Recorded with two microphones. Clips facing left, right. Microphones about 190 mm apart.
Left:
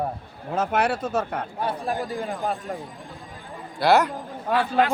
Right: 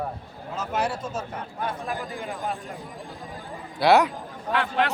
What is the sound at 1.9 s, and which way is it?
Speech, 35° left (ahead or behind).